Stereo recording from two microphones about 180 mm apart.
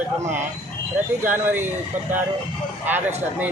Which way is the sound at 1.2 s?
10° right (ahead or behind).